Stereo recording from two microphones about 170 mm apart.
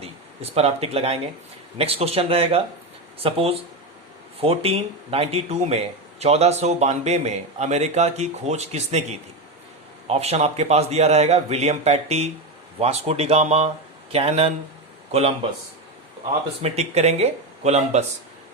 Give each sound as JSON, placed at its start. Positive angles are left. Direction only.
{"t": 0.5, "sound": "speech", "side_deg": -35}
{"t": 16.6, "sound": "speech", "side_deg": -40}